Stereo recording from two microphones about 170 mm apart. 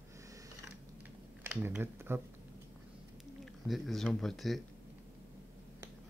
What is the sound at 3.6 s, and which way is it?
Speech, centre (ahead or behind).